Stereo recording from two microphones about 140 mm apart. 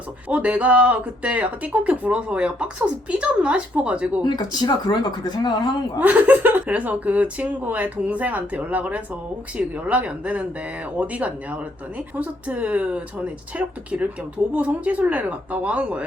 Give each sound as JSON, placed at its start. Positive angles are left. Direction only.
{"t": 0.3, "sound": "speech", "side_deg": -10}
{"t": 4.2, "sound": "speech", "side_deg": 30}
{"t": 6.0, "sound": "speech", "side_deg": -10}